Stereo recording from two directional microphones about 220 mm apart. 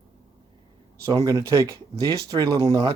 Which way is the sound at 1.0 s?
15° right (ahead or behind).